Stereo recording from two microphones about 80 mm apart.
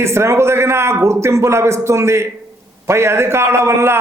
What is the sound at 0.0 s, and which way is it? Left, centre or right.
Speech, right.